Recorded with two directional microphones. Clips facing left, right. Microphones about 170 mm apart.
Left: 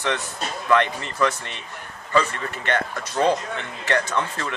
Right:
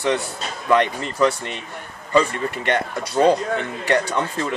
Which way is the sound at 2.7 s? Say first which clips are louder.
Right 2 dB; 15° right (ahead or behind).